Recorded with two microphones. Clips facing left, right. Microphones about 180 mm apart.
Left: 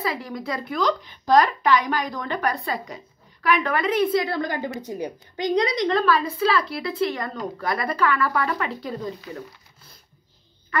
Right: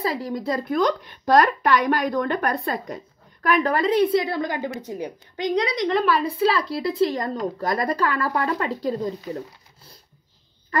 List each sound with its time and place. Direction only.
0.0 s a woman's voice: 35° right (ahead or behind)
0.7 s a woman's voice: 55° right (ahead or behind)
3.4 s a woman's voice: 40° right (ahead or behind)
4.3 s a woman's voice: 10° right (ahead or behind)
6.4 s a woman's voice: 35° right (ahead or behind)